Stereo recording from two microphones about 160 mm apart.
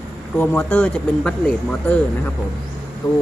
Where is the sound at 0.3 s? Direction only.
10° left (ahead or behind).